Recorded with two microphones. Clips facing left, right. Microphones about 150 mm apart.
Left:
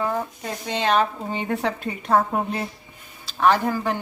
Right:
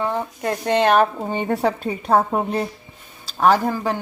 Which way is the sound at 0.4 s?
60° right (ahead or behind).